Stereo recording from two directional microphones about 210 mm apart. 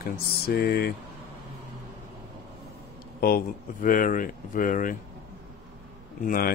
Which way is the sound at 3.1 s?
45° left (ahead or behind).